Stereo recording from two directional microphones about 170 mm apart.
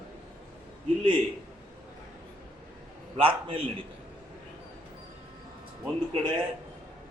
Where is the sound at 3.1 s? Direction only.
30° right (ahead or behind).